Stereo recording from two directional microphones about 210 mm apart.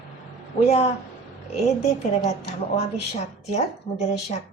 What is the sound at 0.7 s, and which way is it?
A woman's voice, 30° left (ahead or behind).